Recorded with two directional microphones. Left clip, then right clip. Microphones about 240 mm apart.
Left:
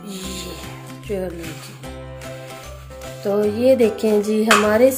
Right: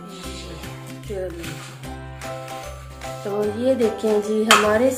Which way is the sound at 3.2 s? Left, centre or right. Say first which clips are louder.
Left 5 dB; left.